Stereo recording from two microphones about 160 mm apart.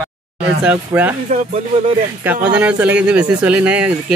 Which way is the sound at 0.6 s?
10° right (ahead or behind).